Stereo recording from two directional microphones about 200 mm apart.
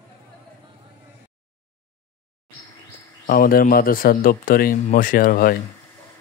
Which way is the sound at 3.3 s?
45° left (ahead or behind).